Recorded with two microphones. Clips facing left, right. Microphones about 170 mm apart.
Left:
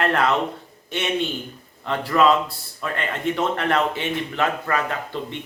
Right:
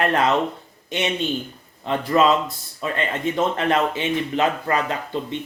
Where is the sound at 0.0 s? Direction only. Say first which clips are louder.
Right 1 dB; 20° right (ahead or behind).